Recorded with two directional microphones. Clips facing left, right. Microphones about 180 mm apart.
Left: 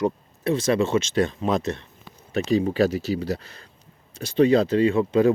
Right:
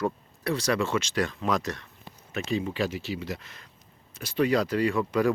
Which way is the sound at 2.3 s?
35° left (ahead or behind).